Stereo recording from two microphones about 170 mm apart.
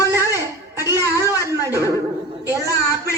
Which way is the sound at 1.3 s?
15° right (ahead or behind).